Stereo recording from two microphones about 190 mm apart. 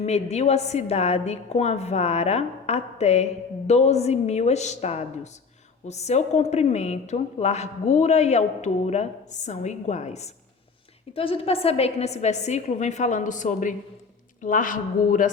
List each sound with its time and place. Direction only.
0.0 s a woman's voice: 35° left (ahead or behind)